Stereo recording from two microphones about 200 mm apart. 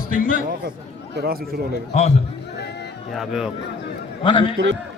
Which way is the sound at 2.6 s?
55° left (ahead or behind).